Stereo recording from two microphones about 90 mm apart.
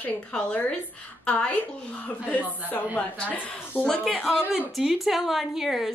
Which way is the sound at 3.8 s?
5° left (ahead or behind).